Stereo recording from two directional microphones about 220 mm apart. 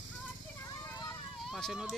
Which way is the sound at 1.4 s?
Centre (ahead or behind).